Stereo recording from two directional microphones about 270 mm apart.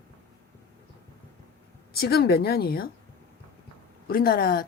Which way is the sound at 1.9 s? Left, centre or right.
Left.